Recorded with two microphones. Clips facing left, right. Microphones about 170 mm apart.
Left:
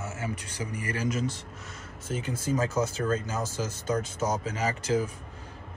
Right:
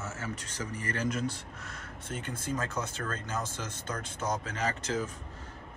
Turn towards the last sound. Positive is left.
turn(degrees=10)  # may be behind; listen again after turning